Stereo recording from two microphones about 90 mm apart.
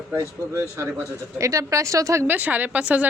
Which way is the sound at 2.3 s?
20° right (ahead or behind).